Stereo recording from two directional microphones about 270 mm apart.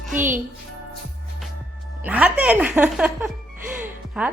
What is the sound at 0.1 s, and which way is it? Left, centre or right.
Music, centre.